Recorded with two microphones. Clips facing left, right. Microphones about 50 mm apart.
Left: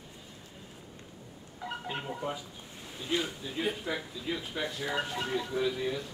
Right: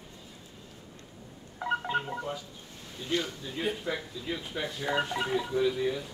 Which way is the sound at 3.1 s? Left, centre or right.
Centre.